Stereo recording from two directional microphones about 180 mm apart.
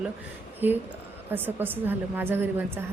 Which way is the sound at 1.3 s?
10° right (ahead or behind).